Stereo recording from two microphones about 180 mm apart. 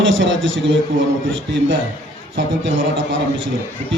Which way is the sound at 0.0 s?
90° right.